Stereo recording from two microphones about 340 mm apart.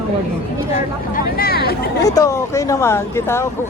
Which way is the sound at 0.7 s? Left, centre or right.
Left.